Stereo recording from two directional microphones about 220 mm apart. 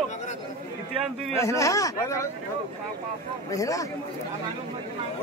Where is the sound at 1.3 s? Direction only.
15° left (ahead or behind).